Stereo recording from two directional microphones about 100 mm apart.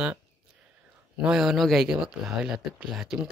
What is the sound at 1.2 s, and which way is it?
Speech, 5° right (ahead or behind).